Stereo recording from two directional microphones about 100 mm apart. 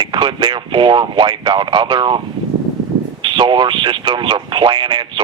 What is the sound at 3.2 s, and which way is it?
Speech, 55° right (ahead or behind).